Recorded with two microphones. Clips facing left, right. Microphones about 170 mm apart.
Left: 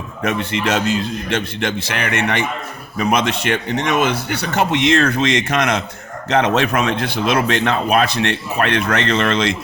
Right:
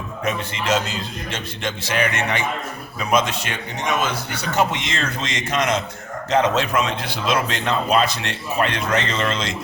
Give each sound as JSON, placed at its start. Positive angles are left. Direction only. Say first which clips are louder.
{"t": 0.3, "sound": "a man's voice", "louder": "left 3 dB", "side_deg": 70}